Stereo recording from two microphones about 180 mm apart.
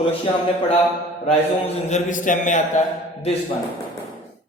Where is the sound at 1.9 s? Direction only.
45° left (ahead or behind).